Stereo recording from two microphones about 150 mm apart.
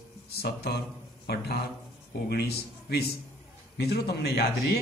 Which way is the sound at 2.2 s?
90° left.